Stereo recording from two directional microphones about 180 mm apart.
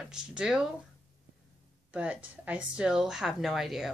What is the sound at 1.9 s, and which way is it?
Speech, 10° right (ahead or behind).